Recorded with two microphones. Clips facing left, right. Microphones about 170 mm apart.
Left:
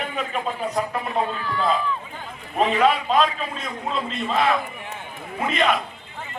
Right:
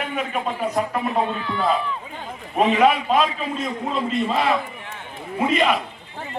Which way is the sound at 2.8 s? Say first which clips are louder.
Even; 5° right (ahead or behind).